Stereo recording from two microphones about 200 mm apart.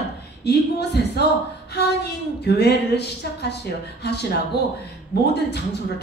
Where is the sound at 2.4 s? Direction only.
55° left (ahead or behind).